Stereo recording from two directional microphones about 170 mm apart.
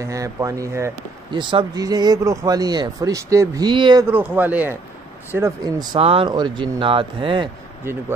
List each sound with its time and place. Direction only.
0.0 s speech: 20° right (ahead or behind)
1.4 s speech: 30° right (ahead or behind)
4.1 s speech: 10° right (ahead or behind)
5.6 s speech: 30° right (ahead or behind)